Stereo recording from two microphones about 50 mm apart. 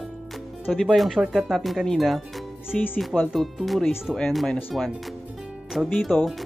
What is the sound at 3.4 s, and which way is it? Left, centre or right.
Speech, centre.